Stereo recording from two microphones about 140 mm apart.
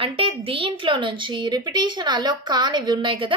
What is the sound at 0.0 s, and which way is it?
A woman's voice, 40° right (ahead or behind).